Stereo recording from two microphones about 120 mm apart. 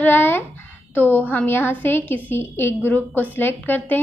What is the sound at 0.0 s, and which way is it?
A woman's voice, 15° left (ahead or behind).